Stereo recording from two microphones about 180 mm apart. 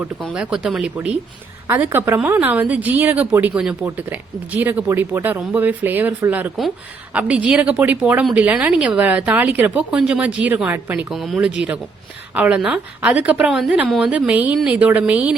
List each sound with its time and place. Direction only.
0.2 s a woman's voice: 5° right (ahead or behind)